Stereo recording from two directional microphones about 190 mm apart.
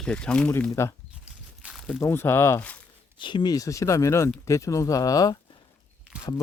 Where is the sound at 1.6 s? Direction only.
Centre (ahead or behind).